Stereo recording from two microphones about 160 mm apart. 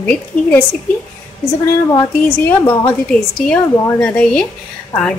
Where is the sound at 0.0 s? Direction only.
10° left (ahead or behind).